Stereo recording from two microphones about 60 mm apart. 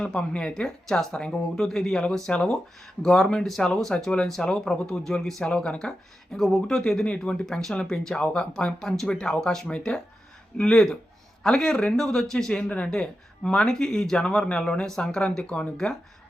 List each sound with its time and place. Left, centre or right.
0.0 s speech: centre
4.9 s speech: centre
6.3 s speech: centre
12.6 s speech: left